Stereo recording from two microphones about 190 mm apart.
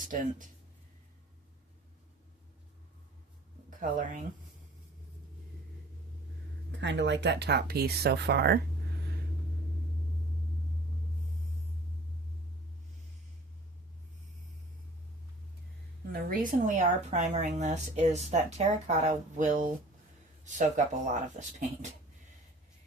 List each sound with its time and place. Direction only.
0.1 s speech: 45° right (ahead or behind)
3.8 s speech: 45° right (ahead or behind)
6.7 s speech: 70° right (ahead or behind)
16.3 s speech: 45° right (ahead or behind)